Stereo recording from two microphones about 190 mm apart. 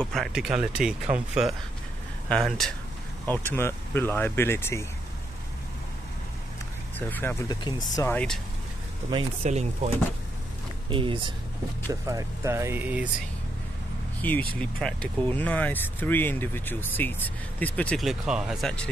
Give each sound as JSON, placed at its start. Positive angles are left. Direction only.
{"t": 0.0, "sound": "speech", "side_deg": 0}
{"t": 7.0, "sound": "speech", "side_deg": 10}
{"t": 9.1, "sound": "speech", "side_deg": -35}
{"t": 14.2, "sound": "speech", "side_deg": 10}